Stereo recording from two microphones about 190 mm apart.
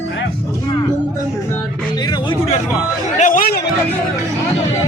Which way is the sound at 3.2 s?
45° left (ahead or behind).